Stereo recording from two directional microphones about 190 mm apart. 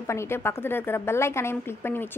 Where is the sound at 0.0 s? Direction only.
15° left (ahead or behind).